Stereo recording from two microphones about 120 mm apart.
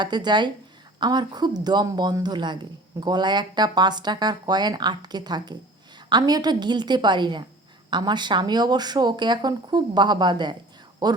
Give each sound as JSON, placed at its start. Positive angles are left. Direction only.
{"t": 0.0, "sound": "speech", "side_deg": -35}